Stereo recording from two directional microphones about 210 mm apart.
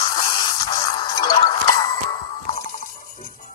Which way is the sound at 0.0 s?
20° left (ahead or behind).